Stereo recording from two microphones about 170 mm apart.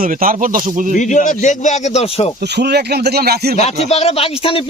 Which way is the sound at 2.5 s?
75° right (ahead or behind).